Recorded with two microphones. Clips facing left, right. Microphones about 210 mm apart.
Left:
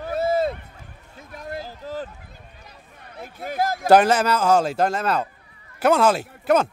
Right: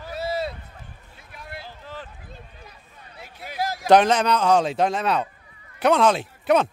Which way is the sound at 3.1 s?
50° left (ahead or behind).